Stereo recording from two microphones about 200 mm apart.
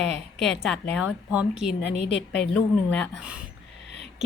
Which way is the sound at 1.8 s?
60° left (ahead or behind).